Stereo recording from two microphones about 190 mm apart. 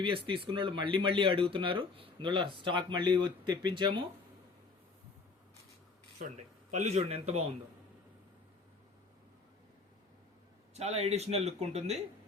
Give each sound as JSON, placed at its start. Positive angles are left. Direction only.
{"t": 0.0, "sound": "speech", "side_deg": -25}
{"t": 6.1, "sound": "speech", "side_deg": -40}
{"t": 10.8, "sound": "speech", "side_deg": -35}